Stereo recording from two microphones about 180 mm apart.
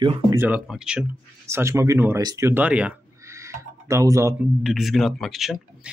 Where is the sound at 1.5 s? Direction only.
15° right (ahead or behind).